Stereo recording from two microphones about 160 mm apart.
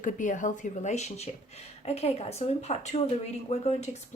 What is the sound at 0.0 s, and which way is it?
A woman's voice, 55° left (ahead or behind).